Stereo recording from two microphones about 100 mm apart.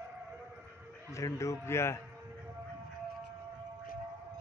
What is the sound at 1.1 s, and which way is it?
Speech, 30° left (ahead or behind).